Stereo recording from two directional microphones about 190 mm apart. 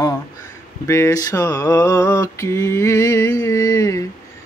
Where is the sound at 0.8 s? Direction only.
15° left (ahead or behind).